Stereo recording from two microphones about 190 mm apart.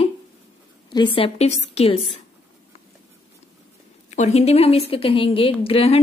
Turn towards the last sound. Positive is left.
turn(degrees=30)  # may be behind; listen again after turning